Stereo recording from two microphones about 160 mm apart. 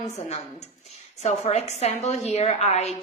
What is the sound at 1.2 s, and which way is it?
A woman's voice, 45° left (ahead or behind).